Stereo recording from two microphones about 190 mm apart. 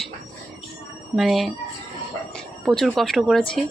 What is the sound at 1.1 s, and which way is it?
Speech, centre (ahead or behind).